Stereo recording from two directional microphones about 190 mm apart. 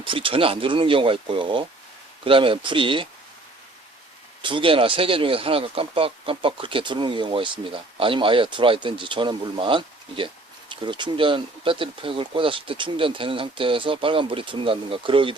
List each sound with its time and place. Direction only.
0.0 s speech: 25° right (ahead or behind)
4.4 s speech: 25° right (ahead or behind)